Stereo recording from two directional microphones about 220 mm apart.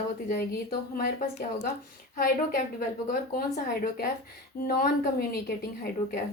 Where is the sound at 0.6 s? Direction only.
45° left (ahead or behind).